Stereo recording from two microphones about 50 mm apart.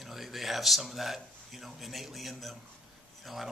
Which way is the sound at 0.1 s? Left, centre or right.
Centre.